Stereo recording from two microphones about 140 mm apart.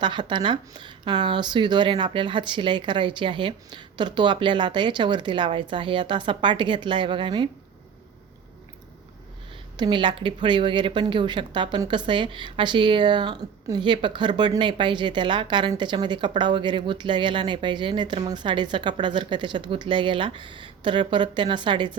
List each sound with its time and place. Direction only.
0.0 s speech: 35° right (ahead or behind)
9.7 s speech: 35° right (ahead or behind)